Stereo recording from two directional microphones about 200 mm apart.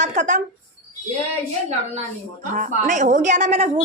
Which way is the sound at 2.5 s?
40° right (ahead or behind).